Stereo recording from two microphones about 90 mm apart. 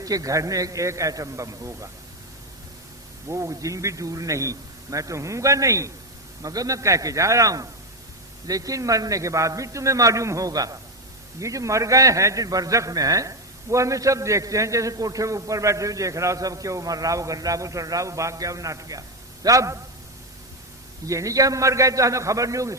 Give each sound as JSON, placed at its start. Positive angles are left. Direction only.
{"t": 0.0, "sound": "a man's voice", "side_deg": -40}
{"t": 3.2, "sound": "a man's voice", "side_deg": -35}
{"t": 21.1, "sound": "a man's voice", "side_deg": -35}